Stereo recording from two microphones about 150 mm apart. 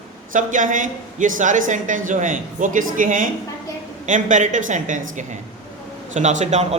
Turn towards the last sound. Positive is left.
turn(degrees=-50)  # may be behind; listen again after turning